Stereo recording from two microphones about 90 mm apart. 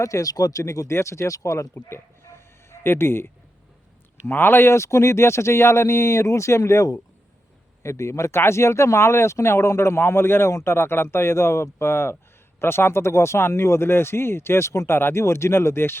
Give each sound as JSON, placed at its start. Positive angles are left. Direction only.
{"t": 0.0, "sound": "speech", "side_deg": 40}
{"t": 4.3, "sound": "speech", "side_deg": 25}